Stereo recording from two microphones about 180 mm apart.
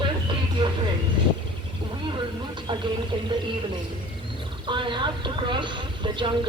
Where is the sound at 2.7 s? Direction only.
25° right (ahead or behind).